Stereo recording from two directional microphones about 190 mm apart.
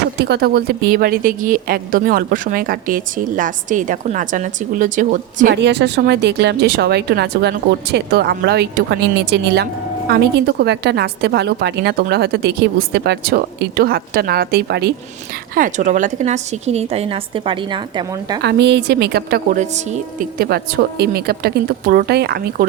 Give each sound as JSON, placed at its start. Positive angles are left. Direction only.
{"t": 0.2, "sound": "a woman's voice", "side_deg": -60}
{"t": 5.5, "sound": "a woman's voice", "side_deg": -65}
{"t": 15.5, "sound": "a woman's voice", "side_deg": -40}
{"t": 18.4, "sound": "a woman's voice", "side_deg": -60}
{"t": 19.5, "sound": "a woman's voice", "side_deg": -40}
{"t": 20.4, "sound": "a woman's voice", "side_deg": -55}